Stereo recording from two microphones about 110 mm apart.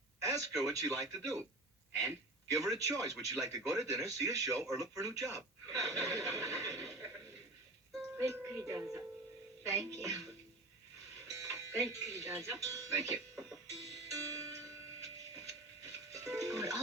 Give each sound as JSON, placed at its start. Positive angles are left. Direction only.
{"t": 0.2, "sound": "a man's voice", "side_deg": -30}
{"t": 8.2, "sound": "speech", "side_deg": -30}
{"t": 11.3, "sound": "speech", "side_deg": -30}
{"t": 14.1, "sound": "music", "side_deg": -30}
{"t": 16.1, "sound": "music", "side_deg": -30}